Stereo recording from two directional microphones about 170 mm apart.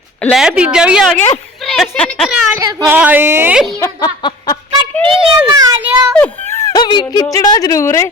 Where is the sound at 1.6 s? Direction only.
Centre (ahead or behind).